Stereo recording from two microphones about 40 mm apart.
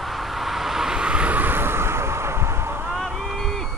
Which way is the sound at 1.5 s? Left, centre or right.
Right.